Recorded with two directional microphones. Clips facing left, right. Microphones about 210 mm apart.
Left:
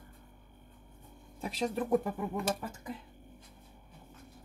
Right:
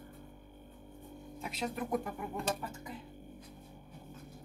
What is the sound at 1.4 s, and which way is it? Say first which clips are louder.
Speech: left 5 dB; 30° left (ahead or behind).